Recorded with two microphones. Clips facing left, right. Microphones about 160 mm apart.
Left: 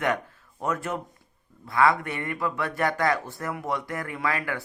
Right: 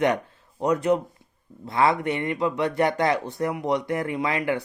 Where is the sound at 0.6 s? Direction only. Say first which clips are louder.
Right 8 dB; 20° right (ahead or behind).